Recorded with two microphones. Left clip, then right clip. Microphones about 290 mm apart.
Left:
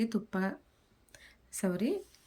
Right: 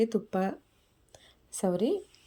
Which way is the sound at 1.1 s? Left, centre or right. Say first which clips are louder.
Right 2 dB; centre.